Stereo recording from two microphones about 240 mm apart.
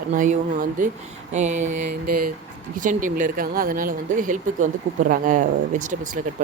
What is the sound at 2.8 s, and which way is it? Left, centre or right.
Speech, right.